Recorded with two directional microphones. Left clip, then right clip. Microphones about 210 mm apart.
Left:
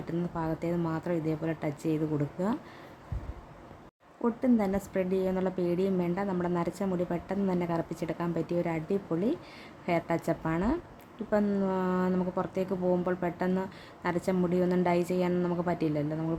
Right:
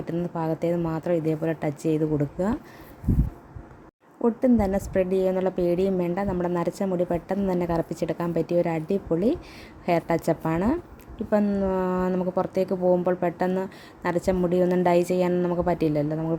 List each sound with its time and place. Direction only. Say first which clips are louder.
0.3 s a woman's voice: right 7 dB; 15° right (ahead or behind)
4.2 s a woman's voice: right 6 dB; 15° right (ahead or behind)